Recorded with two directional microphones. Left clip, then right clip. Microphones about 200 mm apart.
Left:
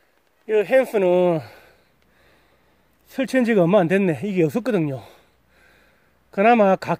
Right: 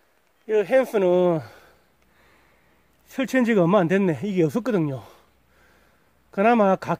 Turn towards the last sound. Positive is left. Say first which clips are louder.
# left 3 dB
turn(degrees=10)  # may be behind; listen again after turning